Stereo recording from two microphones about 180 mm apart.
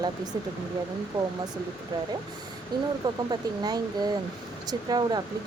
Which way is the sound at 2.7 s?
25° right (ahead or behind).